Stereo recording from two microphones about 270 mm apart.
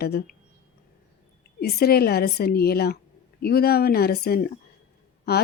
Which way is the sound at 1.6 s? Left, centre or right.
Left.